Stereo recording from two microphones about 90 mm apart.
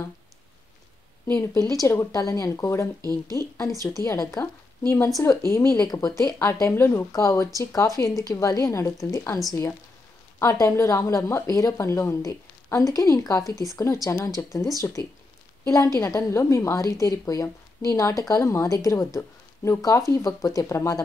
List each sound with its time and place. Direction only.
1.2 s speech: 30° left (ahead or behind)
3.0 s speech: 45° right (ahead or behind)
3.8 s speech: 35° left (ahead or behind)
6.3 s speech: 25° left (ahead or behind)